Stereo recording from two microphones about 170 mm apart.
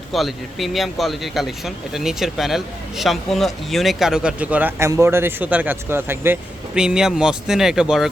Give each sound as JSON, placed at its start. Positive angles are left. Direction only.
{"t": 0.1, "sound": "speech", "side_deg": 0}